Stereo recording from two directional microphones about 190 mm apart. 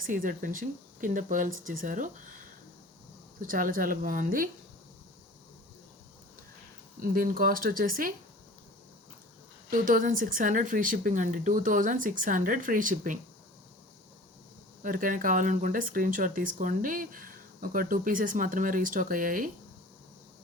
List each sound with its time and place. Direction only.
0.0 s speech: 45° right (ahead or behind)
3.4 s speech: 45° right (ahead or behind)
7.0 s speech: 50° right (ahead or behind)
9.6 s speech: 45° right (ahead or behind)
14.8 s speech: 45° right (ahead or behind)